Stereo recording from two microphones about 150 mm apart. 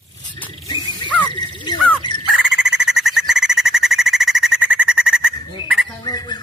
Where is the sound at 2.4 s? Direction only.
5° right (ahead or behind).